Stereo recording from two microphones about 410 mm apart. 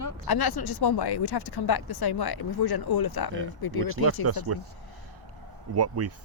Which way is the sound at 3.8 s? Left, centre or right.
Right.